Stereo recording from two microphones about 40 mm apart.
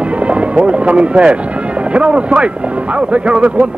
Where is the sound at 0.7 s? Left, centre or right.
Right.